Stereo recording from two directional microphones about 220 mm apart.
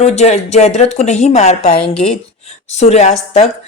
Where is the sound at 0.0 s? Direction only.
30° left (ahead or behind).